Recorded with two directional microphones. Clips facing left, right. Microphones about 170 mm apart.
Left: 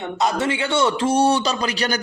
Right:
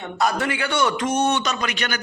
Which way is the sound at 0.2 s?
25° left (ahead or behind).